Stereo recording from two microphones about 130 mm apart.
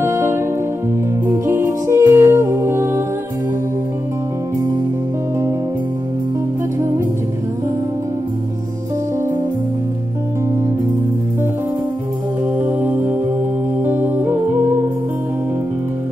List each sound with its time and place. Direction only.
0.0 s music: 20° right (ahead or behind)
12.5 s music: 15° right (ahead or behind)